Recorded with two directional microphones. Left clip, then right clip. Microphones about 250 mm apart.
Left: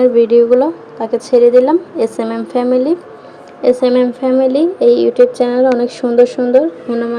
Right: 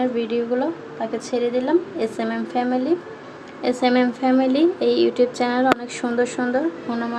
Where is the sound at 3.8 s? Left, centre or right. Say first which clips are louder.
Left 7 dB; centre.